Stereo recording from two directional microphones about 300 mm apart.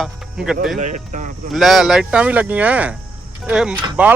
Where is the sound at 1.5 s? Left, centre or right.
Centre.